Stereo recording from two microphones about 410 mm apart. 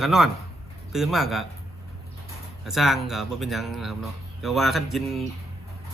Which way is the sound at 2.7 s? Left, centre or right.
Centre.